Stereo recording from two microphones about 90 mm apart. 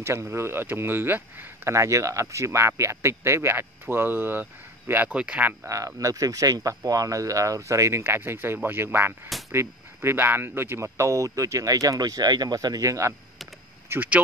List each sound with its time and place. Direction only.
0.0 s speech: 30° right (ahead or behind)
5.7 s speech: 35° right (ahead or behind)
13.8 s speech: 20° right (ahead or behind)